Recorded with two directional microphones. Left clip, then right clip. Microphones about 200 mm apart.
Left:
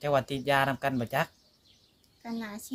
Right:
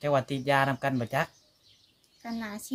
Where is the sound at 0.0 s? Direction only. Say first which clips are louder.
Right 1 dB; 30° left (ahead or behind).